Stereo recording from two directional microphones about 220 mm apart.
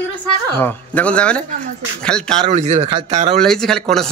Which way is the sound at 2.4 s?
30° right (ahead or behind).